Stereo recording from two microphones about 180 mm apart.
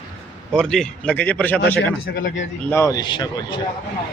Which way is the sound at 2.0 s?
90° left.